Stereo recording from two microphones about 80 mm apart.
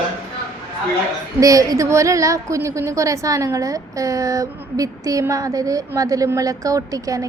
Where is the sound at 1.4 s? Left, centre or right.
Right.